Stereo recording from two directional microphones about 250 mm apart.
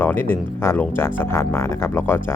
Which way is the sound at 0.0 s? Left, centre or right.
Centre.